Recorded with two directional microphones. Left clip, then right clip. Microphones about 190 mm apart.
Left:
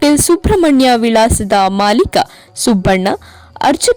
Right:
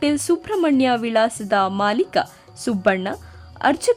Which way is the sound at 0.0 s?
35° left (ahead or behind).